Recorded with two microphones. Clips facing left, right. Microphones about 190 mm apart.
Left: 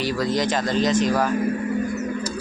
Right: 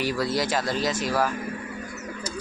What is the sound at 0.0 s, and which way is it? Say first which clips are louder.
Speech: left 3 dB; 10° right (ahead or behind).